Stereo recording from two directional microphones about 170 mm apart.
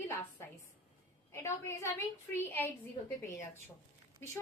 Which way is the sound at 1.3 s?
15° left (ahead or behind).